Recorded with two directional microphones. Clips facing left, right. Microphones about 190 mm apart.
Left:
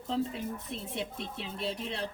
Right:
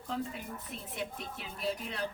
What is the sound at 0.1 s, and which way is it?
A woman's voice, 30° left (ahead or behind).